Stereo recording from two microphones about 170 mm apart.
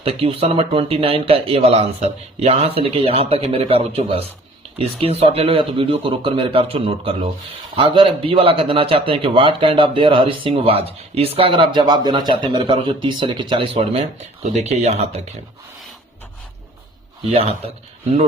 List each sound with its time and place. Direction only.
0.0 s a man's voice: 35° right (ahead or behind)
17.3 s a man's voice: 35° right (ahead or behind)